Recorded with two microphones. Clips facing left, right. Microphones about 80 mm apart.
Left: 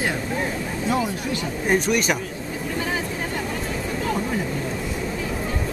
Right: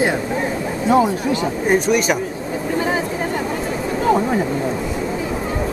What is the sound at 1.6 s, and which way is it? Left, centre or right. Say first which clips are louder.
Speech: right 4 dB; centre.